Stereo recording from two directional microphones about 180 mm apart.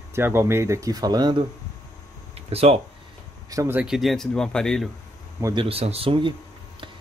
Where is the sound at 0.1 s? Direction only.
15° right (ahead or behind).